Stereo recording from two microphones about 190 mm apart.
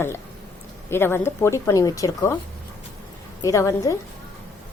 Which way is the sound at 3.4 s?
15° left (ahead or behind).